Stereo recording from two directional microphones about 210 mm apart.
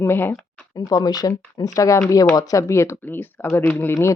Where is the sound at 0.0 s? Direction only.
10° left (ahead or behind).